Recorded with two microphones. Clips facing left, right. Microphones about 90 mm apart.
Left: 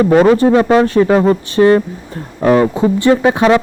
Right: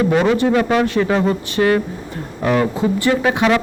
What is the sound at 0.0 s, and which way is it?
Speech, 40° left (ahead or behind).